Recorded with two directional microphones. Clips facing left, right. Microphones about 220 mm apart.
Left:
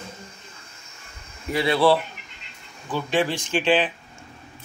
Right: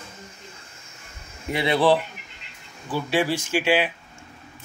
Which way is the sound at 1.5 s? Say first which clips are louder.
Left 1 dB; 20° right (ahead or behind).